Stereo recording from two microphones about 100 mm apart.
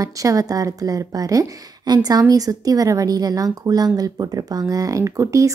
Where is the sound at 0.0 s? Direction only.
35° right (ahead or behind).